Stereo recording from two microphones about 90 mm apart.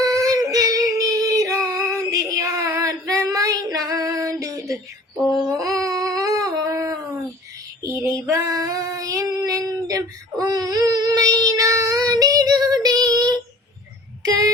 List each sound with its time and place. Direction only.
0.0 s a sound: 40° right (ahead or behind)
2.0 s child singing: 40° right (ahead or behind)
2.7 s female singing: 35° right (ahead or behind)
5.5 s humming: 40° right (ahead or behind)
7.8 s female singing: 30° right (ahead or behind)
14.2 s a sound: 40° right (ahead or behind)